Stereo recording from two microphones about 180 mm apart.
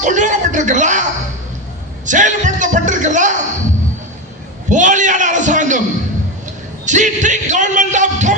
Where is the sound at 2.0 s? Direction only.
45° right (ahead or behind).